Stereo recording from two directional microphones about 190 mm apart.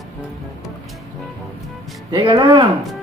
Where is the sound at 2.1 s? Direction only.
25° right (ahead or behind).